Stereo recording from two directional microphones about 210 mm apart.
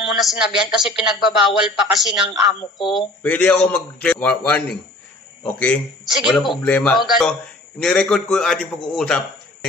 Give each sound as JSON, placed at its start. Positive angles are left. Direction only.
{"t": 0.1, "sound": "speech", "side_deg": 0}